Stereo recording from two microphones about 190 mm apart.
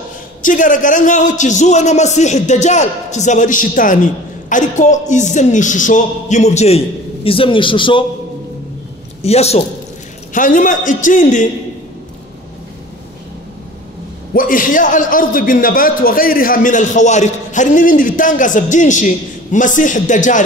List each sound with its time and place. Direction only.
0.4 s a man's voice: 45° left (ahead or behind); by 8.0 s 25° left (ahead or behind)
9.2 s a man's voice: 35° left (ahead or behind)
10.3 s a man's voice: 45° left (ahead or behind)
14.3 s a man's voice: 45° left (ahead or behind)